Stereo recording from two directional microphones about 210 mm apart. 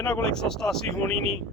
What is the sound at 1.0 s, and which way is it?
Speech, 30° right (ahead or behind).